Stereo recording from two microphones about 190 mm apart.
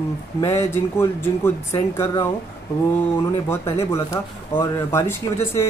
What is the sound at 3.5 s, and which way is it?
Speech, 15° left (ahead or behind).